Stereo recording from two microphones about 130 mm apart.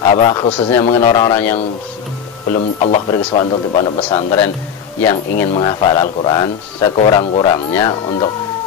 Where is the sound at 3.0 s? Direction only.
40° left (ahead or behind).